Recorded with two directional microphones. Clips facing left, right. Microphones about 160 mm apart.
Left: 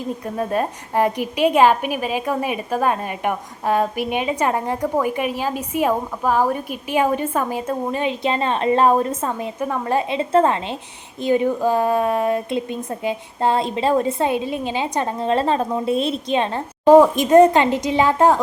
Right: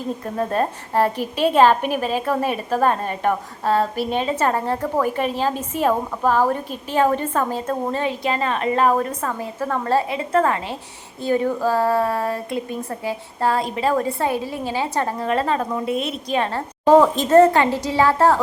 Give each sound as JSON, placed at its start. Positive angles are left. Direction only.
{"t": 0.3, "sound": "a woman's voice", "side_deg": 10}